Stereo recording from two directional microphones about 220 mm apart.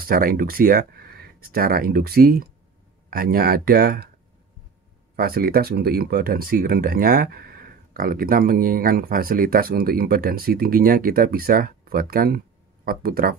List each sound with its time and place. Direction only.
0.0 s speech: 40° right (ahead or behind)
5.1 s speech: 45° right (ahead or behind)